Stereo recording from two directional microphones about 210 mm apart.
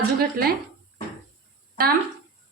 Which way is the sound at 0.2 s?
45° right (ahead or behind).